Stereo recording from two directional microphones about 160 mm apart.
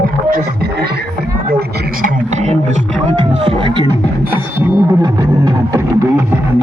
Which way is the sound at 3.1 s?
30° right (ahead or behind).